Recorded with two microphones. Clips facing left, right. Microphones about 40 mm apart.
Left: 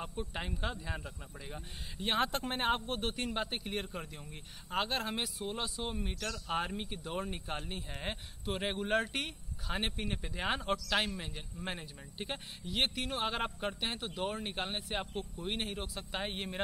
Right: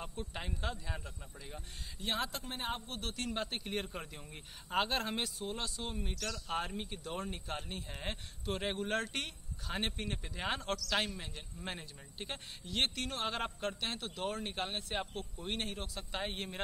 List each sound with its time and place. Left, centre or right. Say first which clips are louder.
0.0 s speech: left 3 dB; centre
2.0 s speech: left 5 dB; left
3.0 s speech: left 4 dB; left
3.3 s a man's voice: left 2 dB; centre